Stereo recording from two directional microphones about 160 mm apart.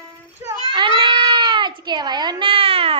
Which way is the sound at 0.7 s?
30° right (ahead or behind).